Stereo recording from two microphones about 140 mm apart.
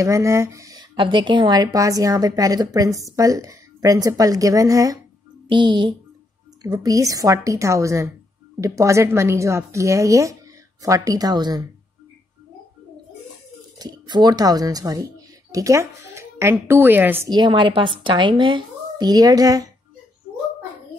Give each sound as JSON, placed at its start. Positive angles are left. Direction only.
{"t": 0.0, "sound": "speech", "side_deg": -20}
{"t": 13.7, "sound": "speech", "side_deg": -30}
{"t": 17.3, "sound": "speech", "side_deg": -35}